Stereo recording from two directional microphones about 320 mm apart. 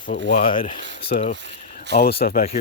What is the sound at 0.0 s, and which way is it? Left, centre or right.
Speech, left.